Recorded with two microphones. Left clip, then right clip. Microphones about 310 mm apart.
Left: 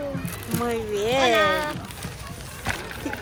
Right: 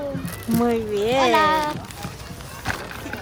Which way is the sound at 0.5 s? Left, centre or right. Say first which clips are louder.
Right 4 dB; centre.